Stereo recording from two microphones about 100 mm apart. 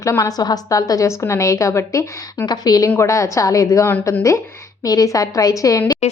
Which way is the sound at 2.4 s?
40° left (ahead or behind).